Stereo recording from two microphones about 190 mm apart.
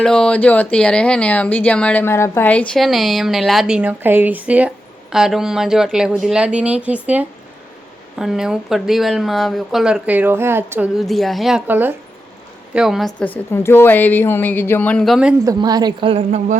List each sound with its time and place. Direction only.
0.0 s speech: 5° left (ahead or behind)
13.1 s a woman's voice: 10° left (ahead or behind)
15.4 s a woman's voice: 20° right (ahead or behind)